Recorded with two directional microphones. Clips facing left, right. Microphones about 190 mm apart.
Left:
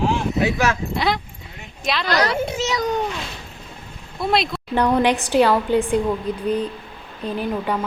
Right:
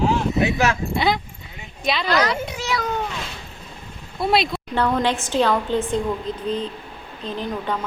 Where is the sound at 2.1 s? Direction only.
30° left (ahead or behind).